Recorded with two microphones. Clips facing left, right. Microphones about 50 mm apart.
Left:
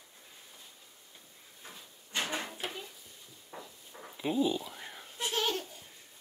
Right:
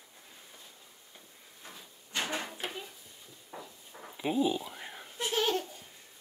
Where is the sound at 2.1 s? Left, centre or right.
Centre.